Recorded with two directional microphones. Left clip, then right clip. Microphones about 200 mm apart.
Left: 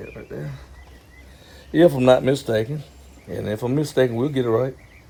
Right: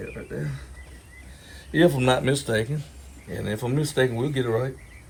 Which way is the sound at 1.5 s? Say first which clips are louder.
Left 4 dB; 30° left (ahead or behind).